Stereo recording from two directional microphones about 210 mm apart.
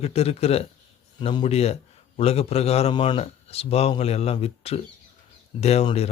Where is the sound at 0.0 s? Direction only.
30° left (ahead or behind).